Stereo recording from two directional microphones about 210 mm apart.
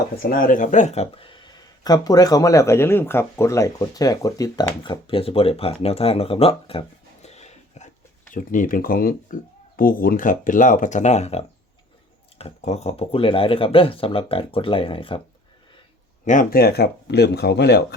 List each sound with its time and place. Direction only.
0.2 s speech: 45° left (ahead or behind); by 15.2 s 25° left (ahead or behind)
16.2 s speech: 40° left (ahead or behind)